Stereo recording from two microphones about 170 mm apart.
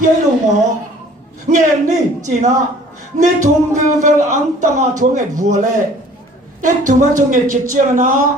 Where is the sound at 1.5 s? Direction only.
45° right (ahead or behind).